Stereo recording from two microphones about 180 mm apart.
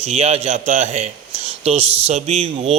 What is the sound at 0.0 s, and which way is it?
A man's voice, 35° right (ahead or behind).